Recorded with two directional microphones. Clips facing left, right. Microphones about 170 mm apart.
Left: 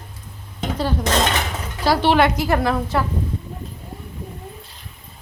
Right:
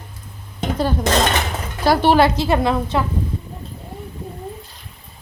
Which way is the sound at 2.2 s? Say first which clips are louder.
Right 2 dB; 25° right (ahead or behind).